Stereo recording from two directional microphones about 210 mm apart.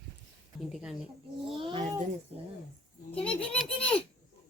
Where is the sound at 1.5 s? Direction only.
25° right (ahead or behind).